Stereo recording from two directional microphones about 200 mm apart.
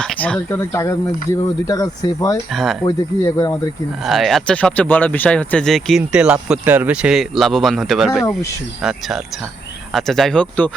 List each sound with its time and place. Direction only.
0.0 s speech: 5° left (ahead or behind)
2.5 s speech: centre (ahead or behind)
2.8 s speech: 15° left (ahead or behind)
4.0 s speech: centre (ahead or behind)